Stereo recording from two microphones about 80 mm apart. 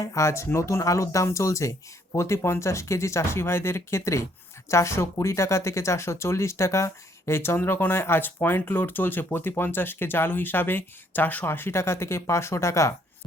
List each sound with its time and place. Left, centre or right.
0.0 s speech: left